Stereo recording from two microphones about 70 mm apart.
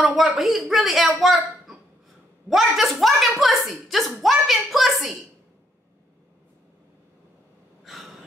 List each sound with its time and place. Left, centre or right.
0.0 s a woman's voice: centre
2.5 s a woman's voice: centre
7.8 s gasp: centre